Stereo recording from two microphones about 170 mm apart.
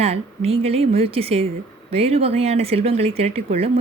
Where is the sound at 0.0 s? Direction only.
35° right (ahead or behind).